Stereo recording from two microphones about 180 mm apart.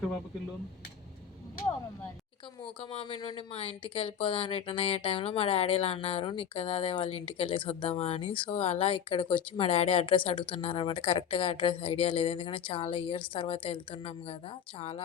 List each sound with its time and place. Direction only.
2.9 s speech: 30° left (ahead or behind)